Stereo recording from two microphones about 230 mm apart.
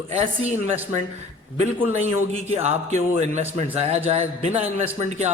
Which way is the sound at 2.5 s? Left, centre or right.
Right.